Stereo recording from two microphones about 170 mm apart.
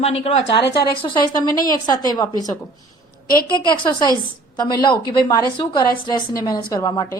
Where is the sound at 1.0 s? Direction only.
25° left (ahead or behind).